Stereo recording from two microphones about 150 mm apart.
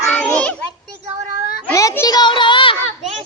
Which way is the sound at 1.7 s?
20° left (ahead or behind).